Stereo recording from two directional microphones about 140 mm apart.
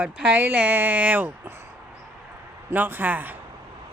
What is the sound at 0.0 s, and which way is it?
Speech, 10° right (ahead or behind).